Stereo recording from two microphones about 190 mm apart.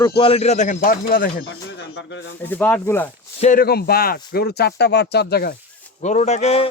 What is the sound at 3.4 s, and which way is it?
Speech, 45° left (ahead or behind).